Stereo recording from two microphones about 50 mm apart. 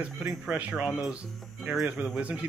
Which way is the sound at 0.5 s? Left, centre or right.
Right.